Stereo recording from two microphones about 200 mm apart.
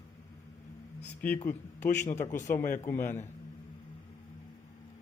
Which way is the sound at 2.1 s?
35° left (ahead or behind).